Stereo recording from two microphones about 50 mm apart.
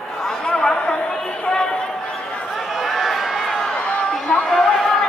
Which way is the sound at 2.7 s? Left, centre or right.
Centre.